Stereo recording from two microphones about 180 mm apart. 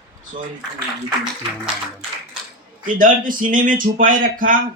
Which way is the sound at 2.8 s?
50° right (ahead or behind).